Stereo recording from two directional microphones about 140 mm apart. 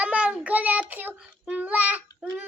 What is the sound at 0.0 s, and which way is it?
Child singing, 10° right (ahead or behind).